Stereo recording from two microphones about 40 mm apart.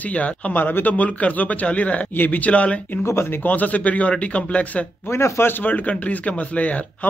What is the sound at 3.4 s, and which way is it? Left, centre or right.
A man's voice, left.